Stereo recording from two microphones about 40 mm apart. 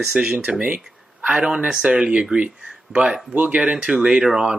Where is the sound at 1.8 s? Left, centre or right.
Right.